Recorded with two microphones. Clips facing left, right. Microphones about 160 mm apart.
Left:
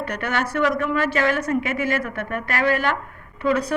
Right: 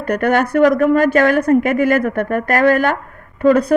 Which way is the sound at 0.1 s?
50° right (ahead or behind).